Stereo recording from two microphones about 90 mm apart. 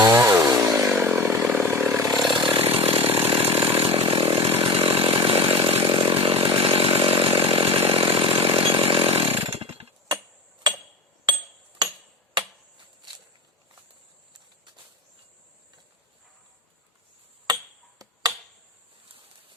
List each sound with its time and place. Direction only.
0.0 s chainsaw: 35° right (ahead or behind)
0.9 s chainsaw: 20° right (ahead or behind)
2.3 s chainsaw: 65° right (ahead or behind); by 10.2 s 90° right
11.3 s hammer: 55° right (ahead or behind)
18.0 s a sound: 45° right (ahead or behind)